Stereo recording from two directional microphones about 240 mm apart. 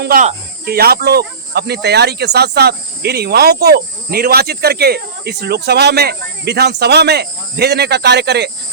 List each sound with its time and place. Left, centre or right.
0.0 s speech: right